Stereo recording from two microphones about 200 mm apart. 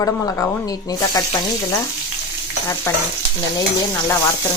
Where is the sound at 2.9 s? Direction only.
15° left (ahead or behind).